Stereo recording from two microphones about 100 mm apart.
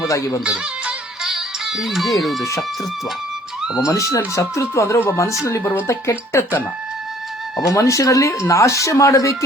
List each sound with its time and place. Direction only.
0.1 s speech: 30° left (ahead or behind)
0.4 s music: 10° right (ahead or behind)
2.4 s speech: 30° left (ahead or behind)
3.8 s speech: 30° left (ahead or behind)
7.7 s speech: 30° left (ahead or behind)